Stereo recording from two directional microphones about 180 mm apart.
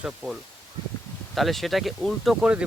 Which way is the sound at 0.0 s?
Centre (ahead or behind).